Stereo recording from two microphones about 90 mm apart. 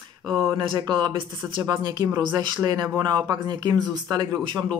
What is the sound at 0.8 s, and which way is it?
Speech, 60° right (ahead or behind).